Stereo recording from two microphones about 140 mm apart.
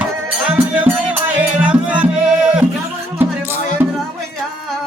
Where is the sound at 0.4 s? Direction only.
10° right (ahead or behind).